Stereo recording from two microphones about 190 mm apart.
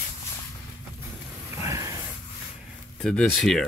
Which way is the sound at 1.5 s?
15° right (ahead or behind).